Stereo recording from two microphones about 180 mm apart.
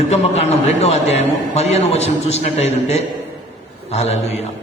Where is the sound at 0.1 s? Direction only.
35° left (ahead or behind).